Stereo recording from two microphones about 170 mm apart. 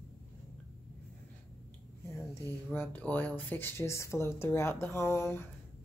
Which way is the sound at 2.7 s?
10° left (ahead or behind).